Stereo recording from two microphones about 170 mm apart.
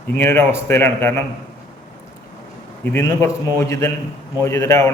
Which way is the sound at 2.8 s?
15° left (ahead or behind).